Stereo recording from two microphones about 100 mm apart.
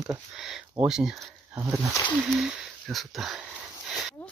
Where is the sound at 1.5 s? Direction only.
25° right (ahead or behind).